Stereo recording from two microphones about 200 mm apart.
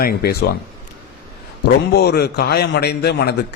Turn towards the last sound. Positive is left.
turn(degrees=55)  # may be behind; listen again after turning